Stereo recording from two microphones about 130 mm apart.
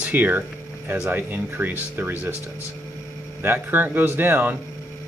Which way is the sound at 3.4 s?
15° right (ahead or behind).